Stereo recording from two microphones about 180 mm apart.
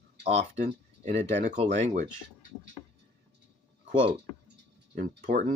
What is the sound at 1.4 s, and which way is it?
Speech, 45° right (ahead or behind).